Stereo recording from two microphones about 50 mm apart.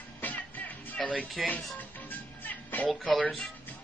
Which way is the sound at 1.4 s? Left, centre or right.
Centre.